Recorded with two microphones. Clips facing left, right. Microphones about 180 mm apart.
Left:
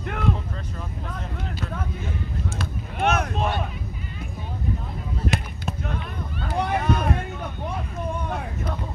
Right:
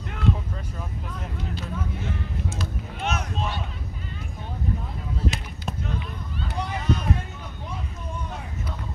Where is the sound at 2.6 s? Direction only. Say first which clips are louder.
Left 5 dB; 55° left (ahead or behind).